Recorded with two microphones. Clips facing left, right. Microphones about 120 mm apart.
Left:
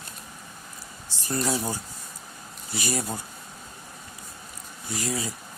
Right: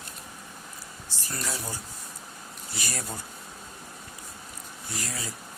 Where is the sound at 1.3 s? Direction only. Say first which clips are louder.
Left 8 dB; 20° left (ahead or behind).